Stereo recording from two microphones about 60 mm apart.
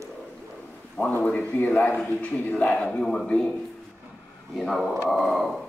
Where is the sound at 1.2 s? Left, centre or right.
Left.